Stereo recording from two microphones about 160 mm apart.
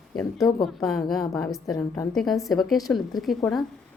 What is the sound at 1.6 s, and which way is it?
Speech, 20° left (ahead or behind).